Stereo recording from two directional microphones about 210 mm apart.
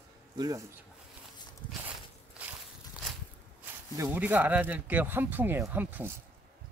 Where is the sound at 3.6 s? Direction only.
10° right (ahead or behind).